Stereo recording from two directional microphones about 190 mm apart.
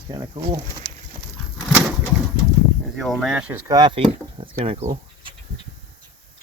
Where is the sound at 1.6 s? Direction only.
5° right (ahead or behind).